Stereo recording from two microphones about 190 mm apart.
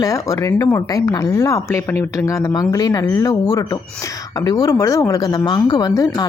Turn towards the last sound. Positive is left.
turn(degrees=20)  # may be behind; listen again after turning